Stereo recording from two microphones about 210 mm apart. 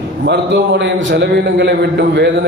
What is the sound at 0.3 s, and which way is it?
A man's voice, 50° right (ahead or behind).